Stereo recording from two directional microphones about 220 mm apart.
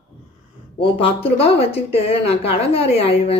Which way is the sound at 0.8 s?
25° left (ahead or behind).